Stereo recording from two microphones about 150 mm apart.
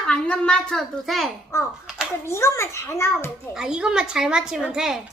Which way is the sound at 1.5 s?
15° left (ahead or behind).